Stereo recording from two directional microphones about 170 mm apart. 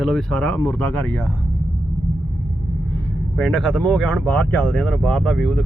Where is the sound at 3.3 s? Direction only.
5° left (ahead or behind).